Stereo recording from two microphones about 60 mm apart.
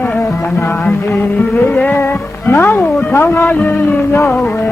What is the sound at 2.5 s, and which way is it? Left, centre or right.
Music, left.